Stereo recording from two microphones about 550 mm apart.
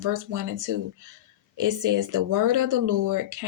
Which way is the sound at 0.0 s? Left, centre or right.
Right.